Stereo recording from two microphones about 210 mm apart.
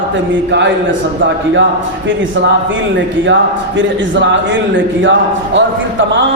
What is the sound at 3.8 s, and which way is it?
Speech, 60° right (ahead or behind).